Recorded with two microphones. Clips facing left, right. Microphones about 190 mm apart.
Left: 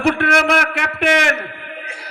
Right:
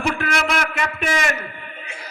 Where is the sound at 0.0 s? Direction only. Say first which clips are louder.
Left 6 dB; 70° left (ahead or behind).